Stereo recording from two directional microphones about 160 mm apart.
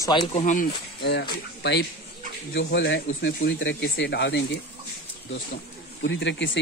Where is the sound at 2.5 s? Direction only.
90° left.